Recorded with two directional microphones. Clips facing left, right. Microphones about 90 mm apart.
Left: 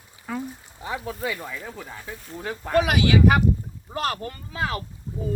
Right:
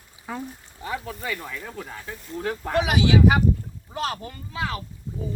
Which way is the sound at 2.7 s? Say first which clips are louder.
Left 1 dB; 50° left (ahead or behind).